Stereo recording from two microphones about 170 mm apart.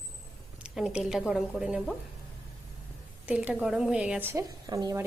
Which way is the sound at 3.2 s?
10° right (ahead or behind).